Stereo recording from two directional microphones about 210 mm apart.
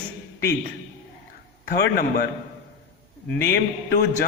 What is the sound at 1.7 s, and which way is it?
Speech, 45° left (ahead or behind).